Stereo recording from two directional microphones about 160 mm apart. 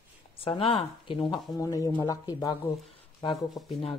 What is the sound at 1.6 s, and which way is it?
Speech, 20° left (ahead or behind).